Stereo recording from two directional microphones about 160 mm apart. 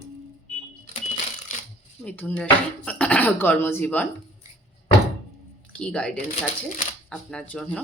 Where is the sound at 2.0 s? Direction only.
10° left (ahead or behind).